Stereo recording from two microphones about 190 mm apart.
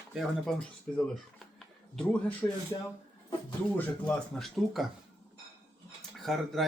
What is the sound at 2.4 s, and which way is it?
Speech, 10° left (ahead or behind).